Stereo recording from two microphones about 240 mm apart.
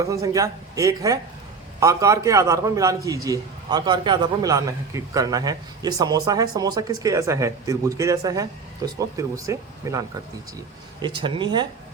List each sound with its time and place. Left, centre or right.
0.0 s a man's voice: centre